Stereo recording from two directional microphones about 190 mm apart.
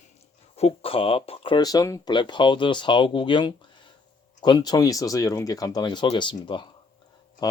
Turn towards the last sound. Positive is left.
turn(degrees=25)  # may be behind; listen again after turning